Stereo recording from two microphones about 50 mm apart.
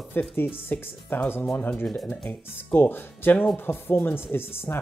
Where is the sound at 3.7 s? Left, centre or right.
Left.